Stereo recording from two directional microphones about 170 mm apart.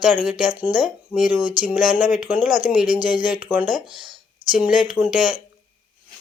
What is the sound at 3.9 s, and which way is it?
Speech, 30° right (ahead or behind).